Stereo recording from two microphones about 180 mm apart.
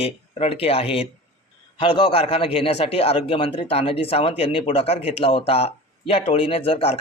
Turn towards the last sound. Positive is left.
turn(degrees=30)  # may be behind; listen again after turning